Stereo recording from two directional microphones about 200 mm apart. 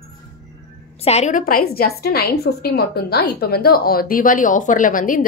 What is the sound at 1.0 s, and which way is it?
A woman's voice, 35° left (ahead or behind).